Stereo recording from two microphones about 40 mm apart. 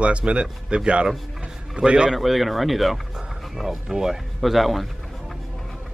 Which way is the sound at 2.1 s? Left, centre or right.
Centre.